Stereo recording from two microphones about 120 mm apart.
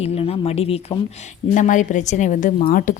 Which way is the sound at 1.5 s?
90° left.